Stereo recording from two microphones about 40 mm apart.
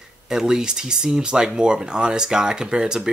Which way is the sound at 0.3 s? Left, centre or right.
Centre.